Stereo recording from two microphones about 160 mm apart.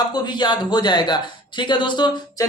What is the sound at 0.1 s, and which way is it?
Speech, 25° left (ahead or behind).